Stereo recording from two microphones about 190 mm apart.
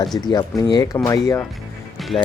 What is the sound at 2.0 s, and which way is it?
Music, centre (ahead or behind).